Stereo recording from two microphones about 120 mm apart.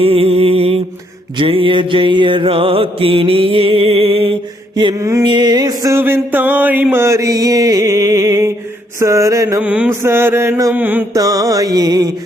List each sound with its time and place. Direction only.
0.0 s music: 55° right (ahead or behind)
1.4 s mantra: 45° right (ahead or behind)
4.9 s mantra: 25° right (ahead or behind)
5.2 s music: 40° right (ahead or behind)
6.0 s a sound: 15° right (ahead or behind)
9.0 s mantra: 25° right (ahead or behind)
9.6 s a sound: 15° right (ahead or behind)
9.9 s mantra: 20° right (ahead or behind)
10.7 s a sound: 15° right (ahead or behind)
11.1 s music: 30° right (ahead or behind)